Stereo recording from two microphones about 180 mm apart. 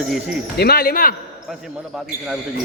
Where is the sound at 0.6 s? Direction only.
60° left (ahead or behind).